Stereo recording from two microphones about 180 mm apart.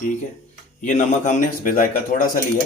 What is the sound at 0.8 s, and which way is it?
Speech, 45° left (ahead or behind).